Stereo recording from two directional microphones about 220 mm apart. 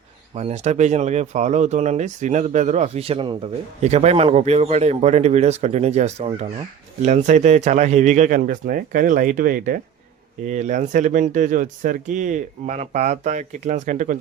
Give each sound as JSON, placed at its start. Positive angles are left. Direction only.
{"t": 0.3, "sound": "speech", "side_deg": -30}